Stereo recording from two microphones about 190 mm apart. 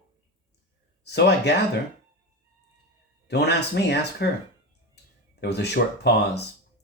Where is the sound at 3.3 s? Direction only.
60° left (ahead or behind).